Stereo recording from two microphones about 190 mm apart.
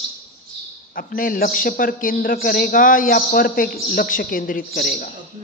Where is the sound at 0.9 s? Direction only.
50° left (ahead or behind).